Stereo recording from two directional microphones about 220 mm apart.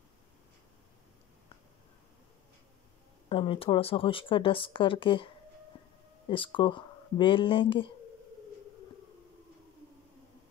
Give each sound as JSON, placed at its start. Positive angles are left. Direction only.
{"t": 3.3, "sound": "speech", "side_deg": 25}